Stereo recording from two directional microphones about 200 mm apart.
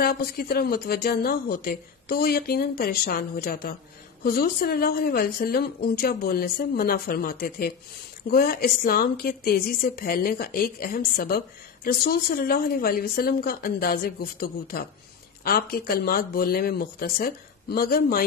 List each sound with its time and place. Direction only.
0.0 s a woman's voice: 50° left (ahead or behind)